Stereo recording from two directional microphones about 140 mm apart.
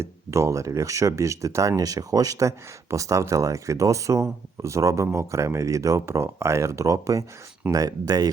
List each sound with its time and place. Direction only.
0.0 s speech: 20° right (ahead or behind)